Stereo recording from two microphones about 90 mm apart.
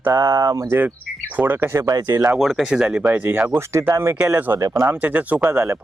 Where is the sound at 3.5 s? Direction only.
30° right (ahead or behind).